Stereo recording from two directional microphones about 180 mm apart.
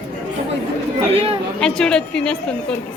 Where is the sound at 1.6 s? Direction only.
5° left (ahead or behind).